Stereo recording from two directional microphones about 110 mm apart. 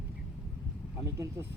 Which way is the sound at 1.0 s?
30° right (ahead or behind).